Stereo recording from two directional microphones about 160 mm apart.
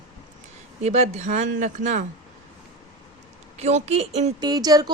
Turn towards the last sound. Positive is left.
turn(degrees=-25)  # may be behind; listen again after turning